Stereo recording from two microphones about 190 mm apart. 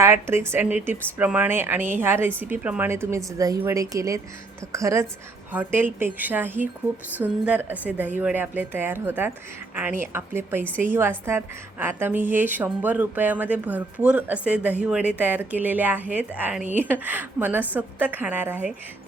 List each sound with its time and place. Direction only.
0.0 s a woman's voice: 15° right (ahead or behind)